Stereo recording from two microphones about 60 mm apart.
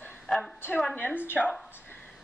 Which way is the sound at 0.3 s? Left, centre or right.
Centre.